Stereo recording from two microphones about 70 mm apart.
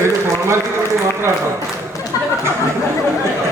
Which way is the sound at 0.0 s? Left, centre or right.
Right.